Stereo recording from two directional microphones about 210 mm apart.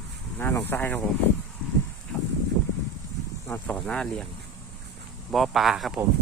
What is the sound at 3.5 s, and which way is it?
Speech, 5° left (ahead or behind).